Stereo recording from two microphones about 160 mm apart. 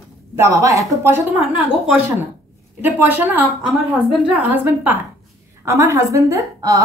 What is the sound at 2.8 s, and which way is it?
A woman's voice, 10° right (ahead or behind).